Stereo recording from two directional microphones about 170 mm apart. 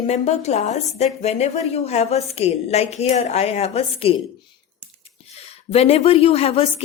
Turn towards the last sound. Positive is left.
turn(degrees=35)  # may be behind; listen again after turning